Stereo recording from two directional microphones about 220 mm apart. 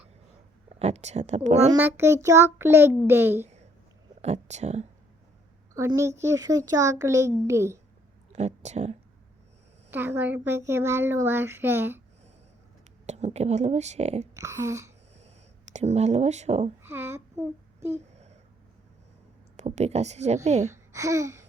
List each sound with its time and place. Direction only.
0.7 s speech: 30° right (ahead or behind)
1.8 s a child's voice: 10° right (ahead or behind)
3.4 s a sound: 30° right (ahead or behind)
4.2 s speech: 30° right (ahead or behind)
5.7 s a child's voice: 15° right (ahead or behind)
8.3 s a woman's voice: 30° right (ahead or behind)
9.9 s a child's voice: 10° right (ahead or behind)
13.1 s speech: 30° right (ahead or behind)
14.3 s a child's voice: 15° right (ahead or behind)
15.7 s a woman's voice: 30° right (ahead or behind)
16.8 s a sound: 10° right (ahead or behind)
19.5 s a woman's voice: 30° right (ahead or behind)
20.9 s a child's voice: 15° right (ahead or behind)